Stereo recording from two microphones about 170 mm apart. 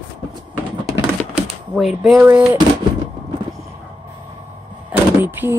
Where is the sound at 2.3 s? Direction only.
10° right (ahead or behind).